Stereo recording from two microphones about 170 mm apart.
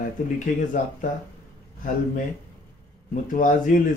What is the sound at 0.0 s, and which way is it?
Speech, 50° left (ahead or behind).